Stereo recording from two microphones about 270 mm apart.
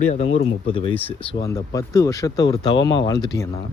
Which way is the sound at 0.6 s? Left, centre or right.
Centre.